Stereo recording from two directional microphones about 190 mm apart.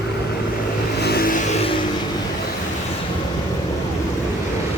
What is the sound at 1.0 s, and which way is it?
Vehicle, 55° left (ahead or behind).